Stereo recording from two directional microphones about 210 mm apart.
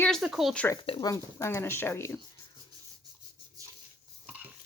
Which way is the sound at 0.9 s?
20° left (ahead or behind).